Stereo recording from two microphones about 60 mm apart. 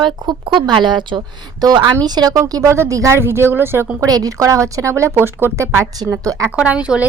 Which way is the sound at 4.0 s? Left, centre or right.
Right.